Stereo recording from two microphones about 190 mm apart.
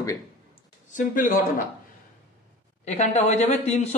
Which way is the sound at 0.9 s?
45° left (ahead or behind).